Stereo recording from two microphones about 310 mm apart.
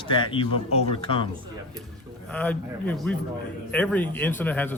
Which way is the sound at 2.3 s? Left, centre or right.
Centre.